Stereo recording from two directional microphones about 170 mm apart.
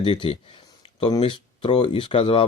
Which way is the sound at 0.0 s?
30° left (ahead or behind).